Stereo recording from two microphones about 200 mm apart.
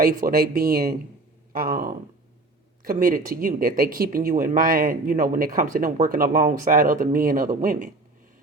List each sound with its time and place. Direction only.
0.0 s speech: 45° right (ahead or behind)